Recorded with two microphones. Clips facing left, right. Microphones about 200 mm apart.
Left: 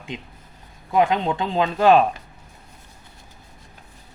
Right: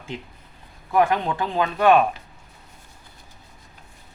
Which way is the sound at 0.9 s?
20° left (ahead or behind).